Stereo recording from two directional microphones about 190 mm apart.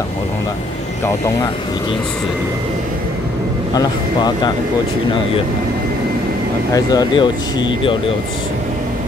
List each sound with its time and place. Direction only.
3.7 s speech: 20° left (ahead or behind)
6.7 s speech: 20° left (ahead or behind)